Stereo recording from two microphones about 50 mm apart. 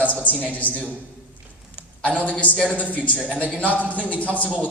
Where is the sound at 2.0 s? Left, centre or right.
Left.